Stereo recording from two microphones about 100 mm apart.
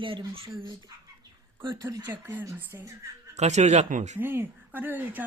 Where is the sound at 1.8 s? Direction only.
30° right (ahead or behind).